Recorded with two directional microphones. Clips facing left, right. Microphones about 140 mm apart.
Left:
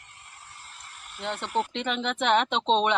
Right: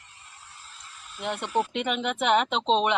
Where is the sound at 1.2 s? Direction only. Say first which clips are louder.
Right 2 dB; 15° right (ahead or behind).